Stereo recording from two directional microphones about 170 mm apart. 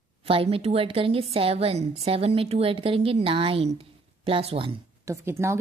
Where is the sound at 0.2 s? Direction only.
35° right (ahead or behind).